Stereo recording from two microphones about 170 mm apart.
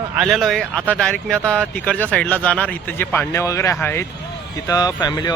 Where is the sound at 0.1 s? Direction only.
Centre (ahead or behind).